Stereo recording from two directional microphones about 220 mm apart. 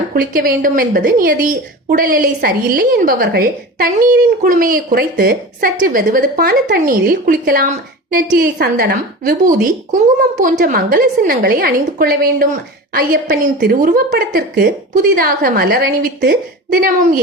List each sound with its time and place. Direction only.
0.1 s a woman's voice: 40° right (ahead or behind)